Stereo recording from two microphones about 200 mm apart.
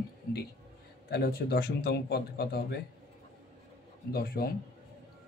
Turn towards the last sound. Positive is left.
turn(degrees=50)  # may be behind; listen again after turning